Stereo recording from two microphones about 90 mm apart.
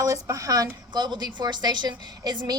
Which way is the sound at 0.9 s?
50° right (ahead or behind).